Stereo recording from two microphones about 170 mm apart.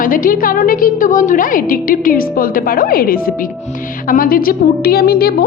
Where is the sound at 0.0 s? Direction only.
55° left (ahead or behind).